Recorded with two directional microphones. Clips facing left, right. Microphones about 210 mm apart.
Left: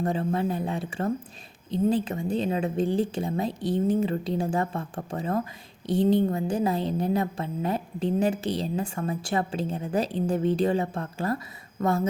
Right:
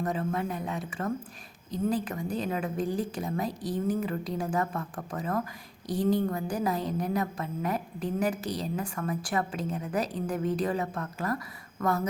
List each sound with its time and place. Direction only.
0.0 s a woman's voice: 30° left (ahead or behind)